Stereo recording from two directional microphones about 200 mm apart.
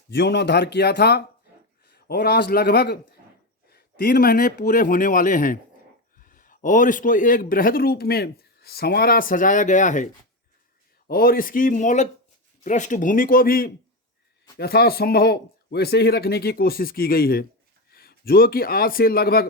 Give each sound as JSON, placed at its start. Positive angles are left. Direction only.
{"t": 0.1, "sound": "a man's voice", "side_deg": 60}
{"t": 11.1, "sound": "a man's voice", "side_deg": 45}